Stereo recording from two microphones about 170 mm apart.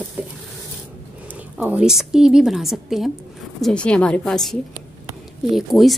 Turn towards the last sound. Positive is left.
turn(degrees=0)  # may be behind; listen again after turning